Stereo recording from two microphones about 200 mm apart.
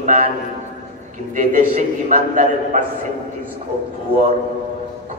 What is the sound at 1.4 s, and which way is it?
A man's voice, 40° right (ahead or behind).